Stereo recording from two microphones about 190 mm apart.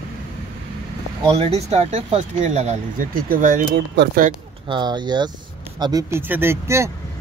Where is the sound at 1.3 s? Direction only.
30° right (ahead or behind); by 4.3 s 55° right (ahead or behind).